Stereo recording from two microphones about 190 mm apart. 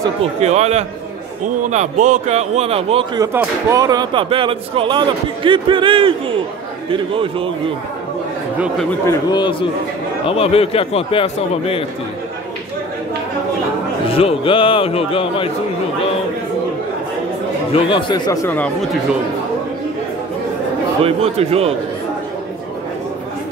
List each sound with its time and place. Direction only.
0.2 s a man's voice: 35° right (ahead or behind)
3.2 s speech: 20° right (ahead or behind)
9.0 s a man's voice: 20° left (ahead or behind)
14.1 s a man's voice: 30° left (ahead or behind)
17.7 s a man's voice: 25° left (ahead or behind); by 18.9 s 10° left (ahead or behind)
21.0 s a man's voice: 30° right (ahead or behind)